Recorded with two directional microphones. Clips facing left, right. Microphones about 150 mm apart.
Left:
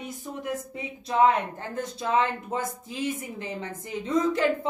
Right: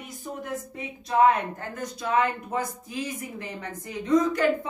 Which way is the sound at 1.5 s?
25° left (ahead or behind).